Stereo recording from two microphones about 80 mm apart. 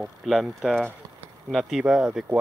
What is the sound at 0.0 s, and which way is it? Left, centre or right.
Speech, centre.